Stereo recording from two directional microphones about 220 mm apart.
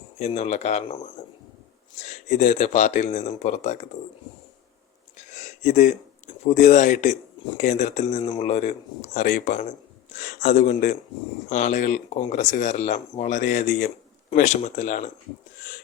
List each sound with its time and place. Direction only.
0.2 s speech: 30° left (ahead or behind)
5.1 s a sound: 35° left (ahead or behind)
7.6 s speech: 30° left (ahead or behind)